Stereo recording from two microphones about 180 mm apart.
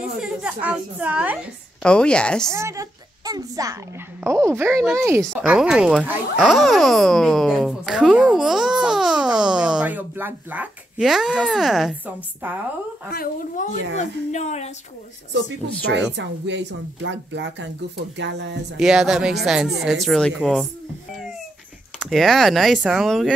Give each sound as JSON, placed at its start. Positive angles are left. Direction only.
{"t": 0.2, "sound": "a woman's voice", "side_deg": -5}
{"t": 1.8, "sound": "a child's voice", "side_deg": 5}
{"t": 2.5, "sound": "a woman's voice", "side_deg": -15}
{"t": 5.2, "sound": "a child's voice", "side_deg": 0}
{"t": 13.1, "sound": "speech", "side_deg": 55}
{"t": 13.9, "sound": "speech", "side_deg": 40}
{"t": 15.3, "sound": "speech", "side_deg": -75}
{"t": 18.8, "sound": "a child's voice", "side_deg": -5}
{"t": 22.0, "sound": "a child's voice", "side_deg": 0}